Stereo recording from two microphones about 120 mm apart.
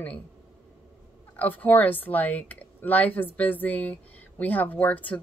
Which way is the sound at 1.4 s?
15° left (ahead or behind).